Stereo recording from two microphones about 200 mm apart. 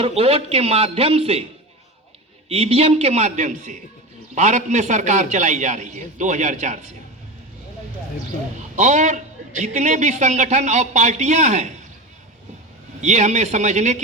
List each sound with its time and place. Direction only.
0.0 s a man's voice: 30° right (ahead or behind)
2.5 s a man's voice: 30° right (ahead or behind)
8.7 s a man's voice: 35° right (ahead or behind)
13.0 s a man's voice: 35° right (ahead or behind)